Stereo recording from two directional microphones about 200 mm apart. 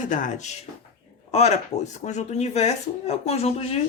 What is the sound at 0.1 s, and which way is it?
Speech, 40° left (ahead or behind).